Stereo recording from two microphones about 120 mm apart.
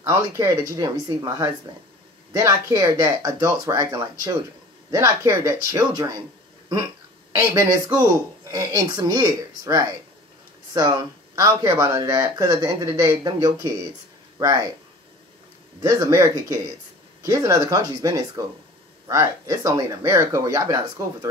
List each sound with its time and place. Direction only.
0.0 s speech: 30° right (ahead or behind)
7.3 s speech: 30° right (ahead or behind)
15.8 s speech: 30° right (ahead or behind)